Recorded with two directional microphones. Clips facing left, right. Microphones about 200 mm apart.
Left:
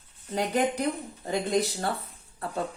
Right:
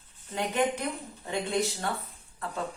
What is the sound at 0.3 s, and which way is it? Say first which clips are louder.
Speech: left 2 dB; 35° left (ahead or behind).